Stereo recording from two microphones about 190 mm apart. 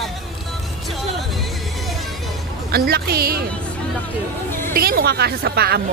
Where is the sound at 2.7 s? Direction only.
55° right (ahead or behind).